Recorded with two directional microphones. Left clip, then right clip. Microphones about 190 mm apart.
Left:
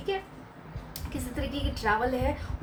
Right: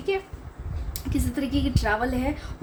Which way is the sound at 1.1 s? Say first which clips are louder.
Right 7 dB; 45° right (ahead or behind).